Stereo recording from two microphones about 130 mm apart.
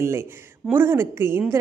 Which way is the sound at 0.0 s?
20° right (ahead or behind).